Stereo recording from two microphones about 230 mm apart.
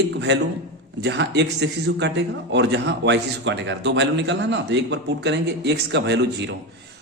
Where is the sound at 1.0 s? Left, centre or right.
Right.